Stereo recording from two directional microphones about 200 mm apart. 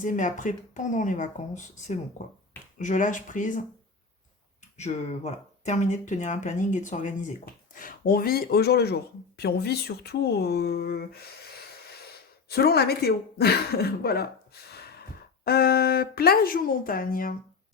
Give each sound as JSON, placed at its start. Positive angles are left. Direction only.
{"t": 0.0, "sound": "speech", "side_deg": 40}
{"t": 4.8, "sound": "speech", "side_deg": 35}
{"t": 12.5, "sound": "speech", "side_deg": 50}